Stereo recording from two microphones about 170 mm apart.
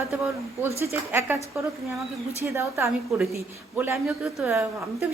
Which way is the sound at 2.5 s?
15° right (ahead or behind).